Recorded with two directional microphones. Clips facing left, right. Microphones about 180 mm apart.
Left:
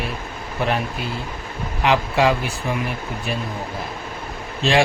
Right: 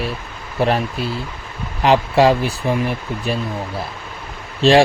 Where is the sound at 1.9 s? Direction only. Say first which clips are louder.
Right 5 dB; 35° right (ahead or behind).